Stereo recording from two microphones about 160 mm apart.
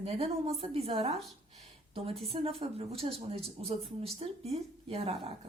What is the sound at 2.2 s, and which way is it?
A woman's voice, 35° right (ahead or behind).